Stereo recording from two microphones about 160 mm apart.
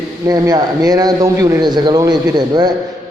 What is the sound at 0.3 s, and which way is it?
A man's voice, 25° right (ahead or behind).